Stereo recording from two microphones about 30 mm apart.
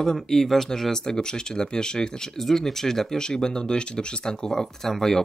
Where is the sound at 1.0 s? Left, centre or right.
Left.